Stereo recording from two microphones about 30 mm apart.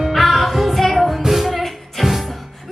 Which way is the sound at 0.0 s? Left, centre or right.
Centre.